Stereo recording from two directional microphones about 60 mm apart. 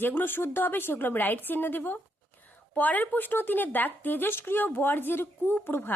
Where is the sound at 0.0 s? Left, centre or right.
Left.